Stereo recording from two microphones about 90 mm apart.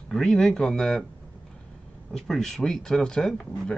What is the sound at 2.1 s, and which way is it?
Speech, 5° left (ahead or behind).